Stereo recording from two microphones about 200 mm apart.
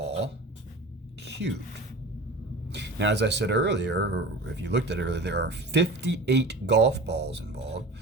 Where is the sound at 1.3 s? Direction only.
60° right (ahead or behind).